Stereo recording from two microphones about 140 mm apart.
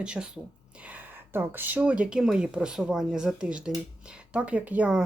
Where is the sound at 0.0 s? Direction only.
5° right (ahead or behind).